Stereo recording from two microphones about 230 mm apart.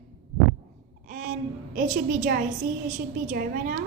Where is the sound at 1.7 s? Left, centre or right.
Right.